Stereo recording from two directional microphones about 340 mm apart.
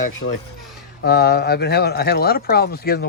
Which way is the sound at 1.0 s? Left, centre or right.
Left.